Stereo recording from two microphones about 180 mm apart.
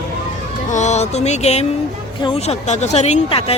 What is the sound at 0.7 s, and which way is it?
Speech, 40° left (ahead or behind).